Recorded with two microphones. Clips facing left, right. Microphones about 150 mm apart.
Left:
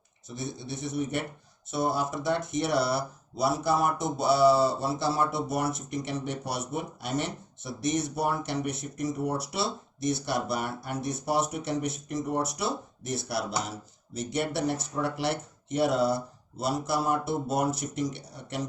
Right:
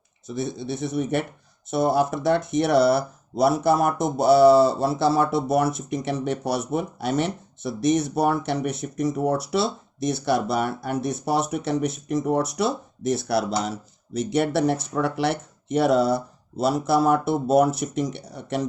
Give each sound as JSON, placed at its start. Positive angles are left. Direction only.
{"t": 0.3, "sound": "speech", "side_deg": -70}
{"t": 1.7, "sound": "speech", "side_deg": -60}